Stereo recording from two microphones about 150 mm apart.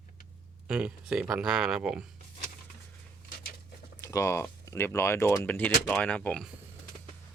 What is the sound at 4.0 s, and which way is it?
Speech, 20° left (ahead or behind).